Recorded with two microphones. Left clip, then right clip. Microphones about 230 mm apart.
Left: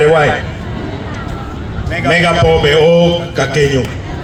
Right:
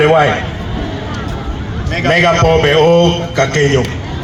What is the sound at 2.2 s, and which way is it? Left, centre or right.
A man's voice, right.